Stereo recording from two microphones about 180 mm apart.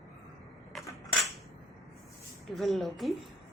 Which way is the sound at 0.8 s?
20° left (ahead or behind).